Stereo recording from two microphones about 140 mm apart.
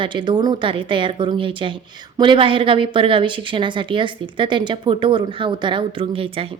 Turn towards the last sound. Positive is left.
turn(degrees=-40)  # may be behind; listen again after turning